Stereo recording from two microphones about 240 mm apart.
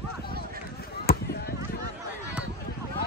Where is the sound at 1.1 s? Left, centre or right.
Left.